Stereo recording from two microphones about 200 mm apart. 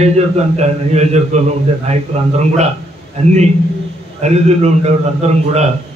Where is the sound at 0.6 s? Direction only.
35° right (ahead or behind).